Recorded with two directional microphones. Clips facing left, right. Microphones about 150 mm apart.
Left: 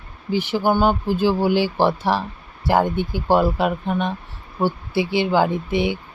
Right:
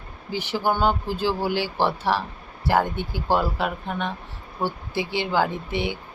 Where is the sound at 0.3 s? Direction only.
15° left (ahead or behind).